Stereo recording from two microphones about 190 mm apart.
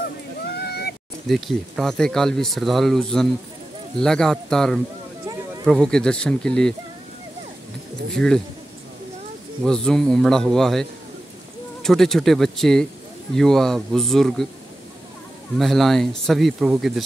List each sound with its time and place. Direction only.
0.6 s a sound: 55° left (ahead or behind)
1.2 s speech: centre (ahead or behind)
8.1 s speech: 5° left (ahead or behind)
9.7 s speech: 5° left (ahead or behind)
15.6 s speech: centre (ahead or behind)